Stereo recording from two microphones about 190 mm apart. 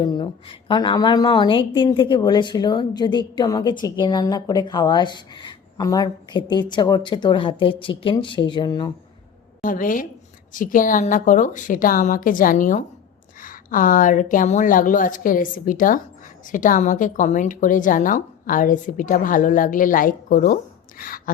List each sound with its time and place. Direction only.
0.0 s a woman's voice: 20° left (ahead or behind)
9.6 s a woman's voice: 45° left (ahead or behind)